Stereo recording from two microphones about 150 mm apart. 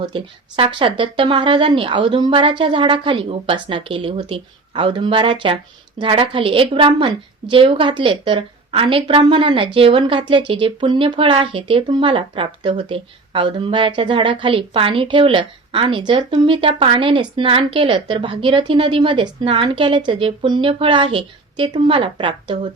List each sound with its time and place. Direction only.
0.0 s a woman's voice: 35° right (ahead or behind)